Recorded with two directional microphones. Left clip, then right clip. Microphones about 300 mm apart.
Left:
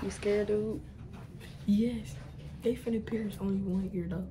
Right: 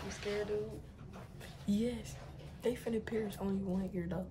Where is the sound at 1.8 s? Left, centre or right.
Right.